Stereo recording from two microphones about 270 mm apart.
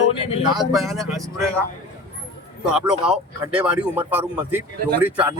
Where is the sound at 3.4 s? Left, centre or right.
Centre.